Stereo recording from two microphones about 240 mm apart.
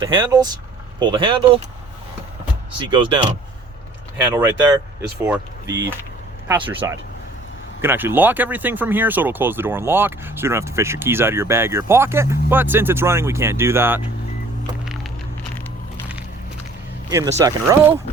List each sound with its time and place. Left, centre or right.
0.0 s speech: centre
2.9 s speech: centre
4.2 s speech: centre
17.1 s speech: centre